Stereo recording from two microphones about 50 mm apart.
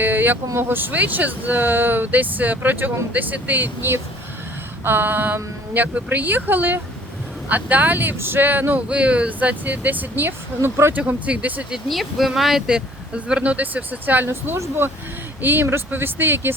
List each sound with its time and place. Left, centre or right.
0.0 s vehicle: right
0.5 s speech: right
8.9 s speech: right
10.9 s speech: right
11.9 s speech: centre
12.6 s speech: centre
14.3 s speech: right
15.4 s speech: right